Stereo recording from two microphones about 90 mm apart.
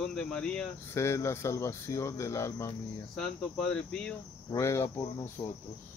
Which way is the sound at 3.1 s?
5° left (ahead or behind).